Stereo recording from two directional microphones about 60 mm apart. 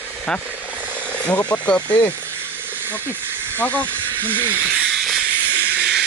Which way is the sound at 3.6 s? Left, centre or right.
Left.